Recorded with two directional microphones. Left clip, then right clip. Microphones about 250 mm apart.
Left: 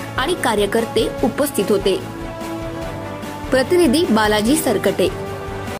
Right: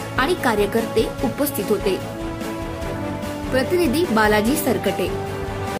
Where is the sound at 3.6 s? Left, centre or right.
Centre.